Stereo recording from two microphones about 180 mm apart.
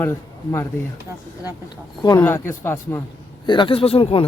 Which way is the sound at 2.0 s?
25° left (ahead or behind).